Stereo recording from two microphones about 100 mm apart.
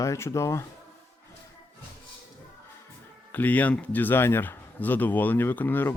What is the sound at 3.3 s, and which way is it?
Speech, 15° left (ahead or behind).